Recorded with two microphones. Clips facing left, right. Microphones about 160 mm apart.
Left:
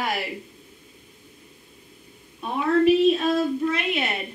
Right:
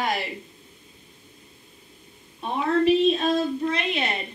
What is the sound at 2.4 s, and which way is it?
Speech, 25° right (ahead or behind).